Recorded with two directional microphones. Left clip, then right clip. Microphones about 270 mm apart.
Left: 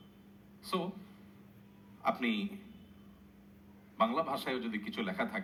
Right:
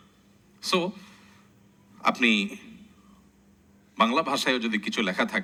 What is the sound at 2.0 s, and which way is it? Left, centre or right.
Speech, right.